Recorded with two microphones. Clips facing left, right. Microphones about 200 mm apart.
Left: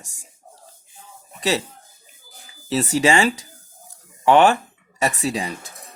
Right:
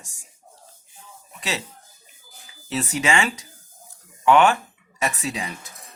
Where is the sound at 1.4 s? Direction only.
35° left (ahead or behind).